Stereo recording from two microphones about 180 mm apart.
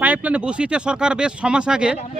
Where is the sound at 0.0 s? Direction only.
10° right (ahead or behind).